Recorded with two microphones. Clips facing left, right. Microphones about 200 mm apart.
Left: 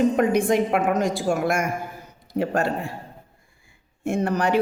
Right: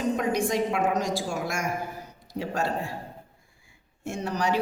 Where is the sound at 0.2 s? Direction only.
55° left (ahead or behind).